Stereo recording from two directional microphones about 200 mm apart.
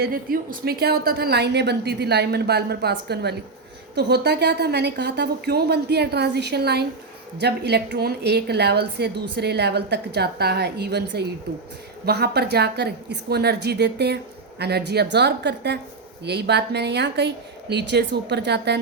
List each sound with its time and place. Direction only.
0.0 s a woman's voice: 45° right (ahead or behind)